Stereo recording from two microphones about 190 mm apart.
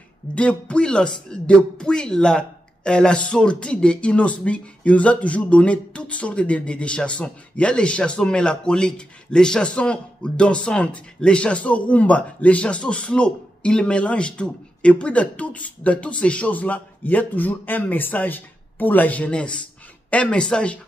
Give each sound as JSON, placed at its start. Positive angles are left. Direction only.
{"t": 0.3, "sound": "speech", "side_deg": 5}